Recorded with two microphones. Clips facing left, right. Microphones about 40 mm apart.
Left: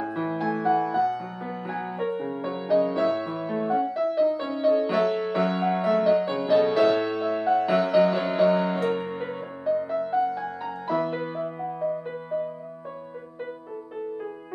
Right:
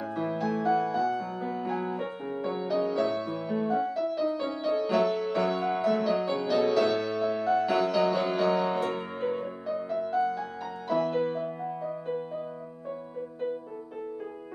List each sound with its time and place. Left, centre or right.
0.0 s music: centre